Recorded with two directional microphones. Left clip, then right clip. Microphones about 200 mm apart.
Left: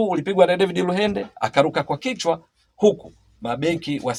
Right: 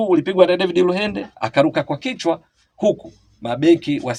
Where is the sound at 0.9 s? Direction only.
20° left (ahead or behind).